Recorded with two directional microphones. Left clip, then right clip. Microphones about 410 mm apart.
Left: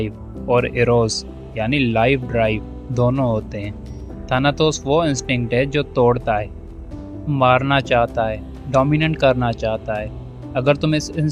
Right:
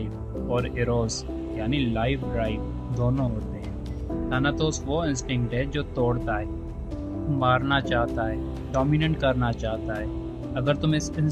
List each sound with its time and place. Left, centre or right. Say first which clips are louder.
0.5 s speech: left 11 dB; centre
4.3 s speech: left 9 dB; centre